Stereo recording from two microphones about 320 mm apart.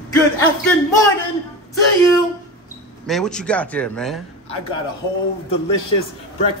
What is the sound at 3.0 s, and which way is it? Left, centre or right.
A man's voice, centre.